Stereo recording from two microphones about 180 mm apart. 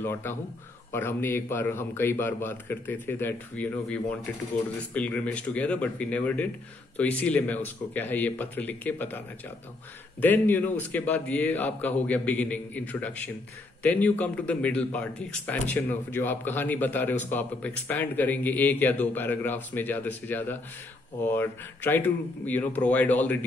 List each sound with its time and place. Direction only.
0.0 s a man's voice: 15° left (ahead or behind)
10.2 s a man's voice: 10° left (ahead or behind)